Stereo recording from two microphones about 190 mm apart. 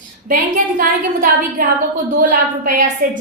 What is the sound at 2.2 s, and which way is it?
Speech, 45° right (ahead or behind).